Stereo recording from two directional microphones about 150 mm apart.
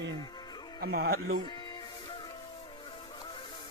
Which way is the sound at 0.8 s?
90° right.